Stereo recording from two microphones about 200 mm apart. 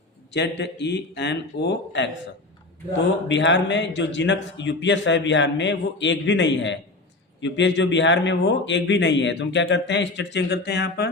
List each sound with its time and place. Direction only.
0.3 s a man's voice: 60° left (ahead or behind)
3.2 s a man's voice: 65° left (ahead or behind)